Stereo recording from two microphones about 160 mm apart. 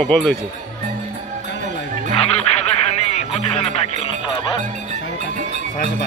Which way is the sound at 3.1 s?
40° left (ahead or behind).